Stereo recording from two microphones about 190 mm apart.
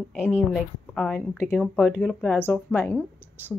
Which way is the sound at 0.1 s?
5° right (ahead or behind).